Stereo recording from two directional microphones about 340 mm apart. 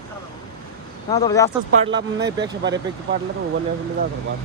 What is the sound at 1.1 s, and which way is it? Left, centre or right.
Speech, centre.